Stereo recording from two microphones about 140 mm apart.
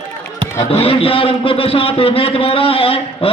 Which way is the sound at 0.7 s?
40° left (ahead or behind).